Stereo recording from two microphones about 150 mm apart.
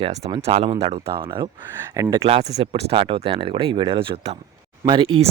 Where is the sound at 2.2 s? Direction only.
40° right (ahead or behind).